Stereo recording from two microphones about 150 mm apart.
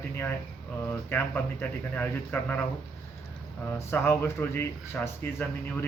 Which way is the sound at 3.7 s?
15° left (ahead or behind).